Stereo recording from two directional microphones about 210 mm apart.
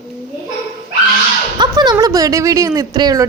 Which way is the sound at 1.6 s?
20° right (ahead or behind).